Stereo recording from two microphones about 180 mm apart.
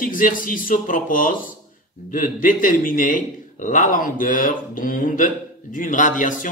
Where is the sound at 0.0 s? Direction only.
50° left (ahead or behind).